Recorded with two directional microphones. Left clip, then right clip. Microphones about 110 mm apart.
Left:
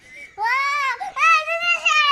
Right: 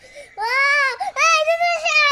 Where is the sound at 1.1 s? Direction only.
30° right (ahead or behind).